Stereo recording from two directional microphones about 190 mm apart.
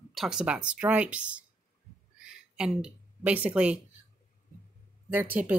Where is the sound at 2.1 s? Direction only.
5° right (ahead or behind).